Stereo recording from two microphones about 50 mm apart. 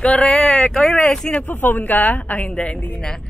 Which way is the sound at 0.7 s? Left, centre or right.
Centre.